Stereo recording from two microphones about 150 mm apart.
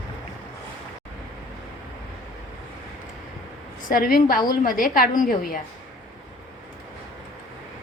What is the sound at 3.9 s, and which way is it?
A woman's voice, 70° left (ahead or behind).